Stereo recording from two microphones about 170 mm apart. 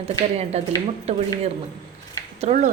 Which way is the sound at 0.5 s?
40° right (ahead or behind).